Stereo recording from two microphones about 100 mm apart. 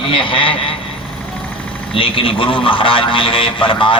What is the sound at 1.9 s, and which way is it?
A man's voice, 65° left (ahead or behind).